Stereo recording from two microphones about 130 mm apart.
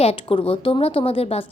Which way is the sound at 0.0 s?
50° left (ahead or behind).